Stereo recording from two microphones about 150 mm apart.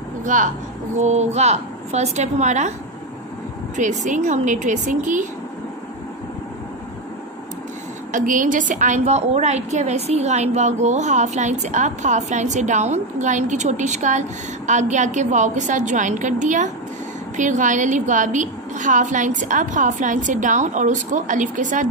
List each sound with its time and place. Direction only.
0.2 s a woman's voice: 60° right (ahead or behind)
3.7 s a woman's voice: 55° right (ahead or behind)
8.1 s a woman's voice: 60° right (ahead or behind)